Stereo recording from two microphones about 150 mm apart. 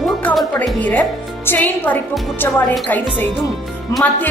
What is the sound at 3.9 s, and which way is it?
Music, 20° left (ahead or behind).